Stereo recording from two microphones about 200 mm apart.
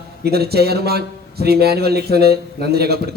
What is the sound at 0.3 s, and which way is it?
A man's voice, 50° right (ahead or behind).